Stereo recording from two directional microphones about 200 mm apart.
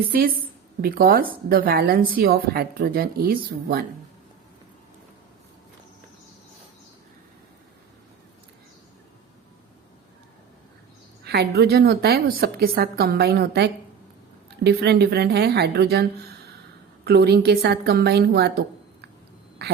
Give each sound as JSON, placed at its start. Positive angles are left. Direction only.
{"t": 0.1, "sound": "a woman's voice", "side_deg": -45}
{"t": 11.2, "sound": "a woman's voice", "side_deg": -55}
{"t": 17.1, "sound": "a woman's voice", "side_deg": -55}
{"t": 19.6, "sound": "a sound", "side_deg": -55}